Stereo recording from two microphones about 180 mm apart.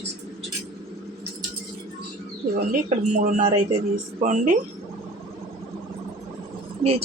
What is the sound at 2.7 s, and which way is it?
Speech, 45° right (ahead or behind).